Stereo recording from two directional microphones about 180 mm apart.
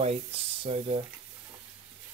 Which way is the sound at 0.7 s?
35° right (ahead or behind).